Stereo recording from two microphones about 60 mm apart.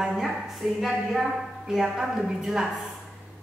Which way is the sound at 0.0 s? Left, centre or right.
Centre.